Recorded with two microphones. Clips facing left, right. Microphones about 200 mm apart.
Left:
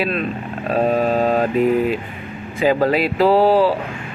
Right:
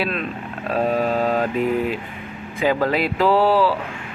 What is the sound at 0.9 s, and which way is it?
Music, 40° left (ahead or behind).